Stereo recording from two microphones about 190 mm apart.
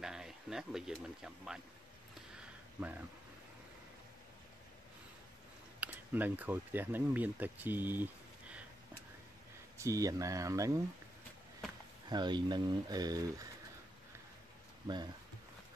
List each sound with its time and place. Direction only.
0.0 s speech: 5° right (ahead or behind)
2.3 s a sound: 10° right (ahead or behind)
5.8 s speech: 10° right (ahead or behind)
9.8 s speech: 15° right (ahead or behind)
12.1 s speech: 25° right (ahead or behind)